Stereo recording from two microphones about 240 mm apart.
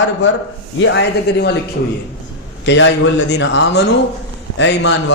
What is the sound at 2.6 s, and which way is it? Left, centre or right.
A man's voice, left.